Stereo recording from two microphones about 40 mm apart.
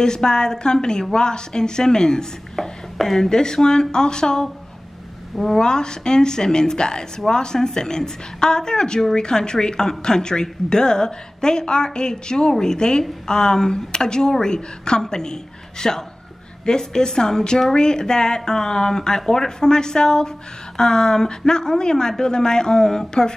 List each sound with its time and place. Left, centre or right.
0.0 s a woman's voice: centre